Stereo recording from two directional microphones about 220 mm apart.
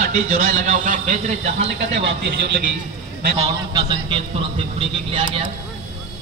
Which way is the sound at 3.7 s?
20° right (ahead or behind).